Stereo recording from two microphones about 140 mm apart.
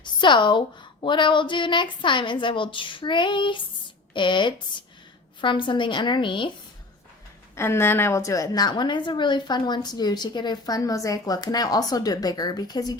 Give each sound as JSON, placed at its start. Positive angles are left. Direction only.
{"t": 0.0, "sound": "a woman's voice", "side_deg": 35}
{"t": 7.5, "sound": "a woman's voice", "side_deg": 20}